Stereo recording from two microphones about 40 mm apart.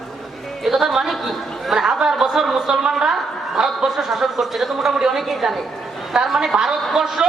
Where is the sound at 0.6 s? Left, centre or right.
Centre.